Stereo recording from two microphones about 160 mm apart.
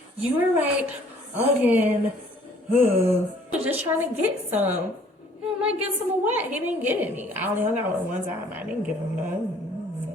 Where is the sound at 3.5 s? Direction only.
10° right (ahead or behind).